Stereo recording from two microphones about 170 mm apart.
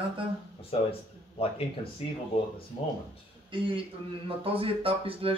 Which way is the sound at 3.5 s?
30° right (ahead or behind).